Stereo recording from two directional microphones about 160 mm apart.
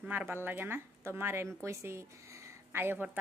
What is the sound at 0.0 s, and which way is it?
Speech, 10° right (ahead or behind).